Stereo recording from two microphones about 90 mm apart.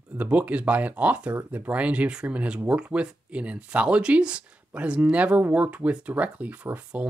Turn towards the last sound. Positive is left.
turn(degrees=-15)  # may be behind; listen again after turning